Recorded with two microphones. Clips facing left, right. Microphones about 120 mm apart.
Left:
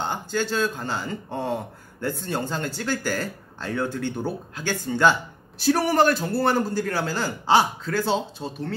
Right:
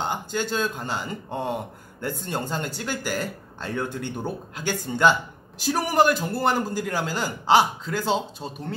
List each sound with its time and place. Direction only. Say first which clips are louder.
0.1 s speech: left 1 dB; 15° right (ahead or behind)